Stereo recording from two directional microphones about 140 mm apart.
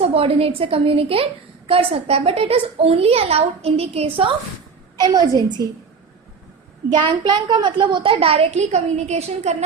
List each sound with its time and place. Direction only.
0.0 s a woman's voice: 45° right (ahead or behind)
5.1 s a woman's voice: 30° right (ahead or behind)
6.9 s a woman's voice: 30° right (ahead or behind); by 9.6 s 50° right (ahead or behind)